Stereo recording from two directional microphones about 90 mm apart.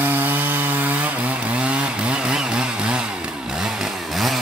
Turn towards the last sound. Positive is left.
turn(degrees=0)  # may be behind; listen again after turning